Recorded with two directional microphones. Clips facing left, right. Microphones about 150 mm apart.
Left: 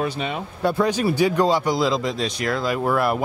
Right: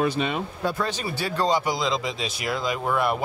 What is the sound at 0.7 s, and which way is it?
Speech, 10° left (ahead or behind).